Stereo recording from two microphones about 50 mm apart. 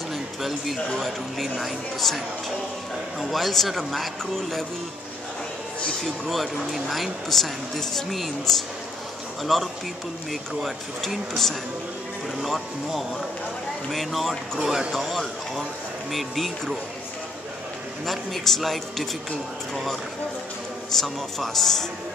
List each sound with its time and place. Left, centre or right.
0.1 s a sound: centre
0.9 s speech: centre
6.2 s speech: centre
18.0 s speech: centre
21.0 s speech: centre